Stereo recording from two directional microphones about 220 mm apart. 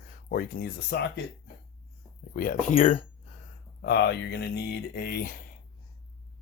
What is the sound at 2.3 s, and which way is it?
Speech, 40° left (ahead or behind).